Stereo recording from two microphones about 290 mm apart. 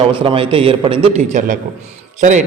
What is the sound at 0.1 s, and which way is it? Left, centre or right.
A man's voice, centre.